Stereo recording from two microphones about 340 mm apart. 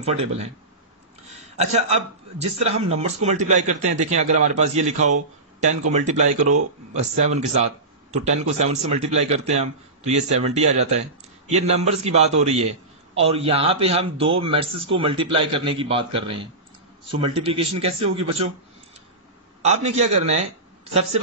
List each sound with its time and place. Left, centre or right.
0.0 s a man's voice: centre
19.6 s a man's voice: centre